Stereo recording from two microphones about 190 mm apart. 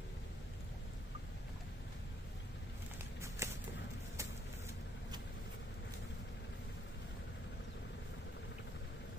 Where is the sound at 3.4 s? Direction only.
15° right (ahead or behind).